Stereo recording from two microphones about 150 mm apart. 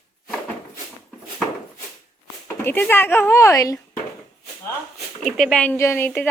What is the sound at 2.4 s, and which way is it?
A woman's voice, 15° left (ahead or behind).